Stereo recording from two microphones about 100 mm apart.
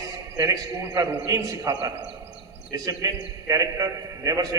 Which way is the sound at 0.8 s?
35° right (ahead or behind).